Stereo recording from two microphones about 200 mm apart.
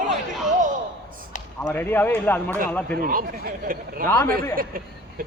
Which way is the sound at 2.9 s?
45° right (ahead or behind).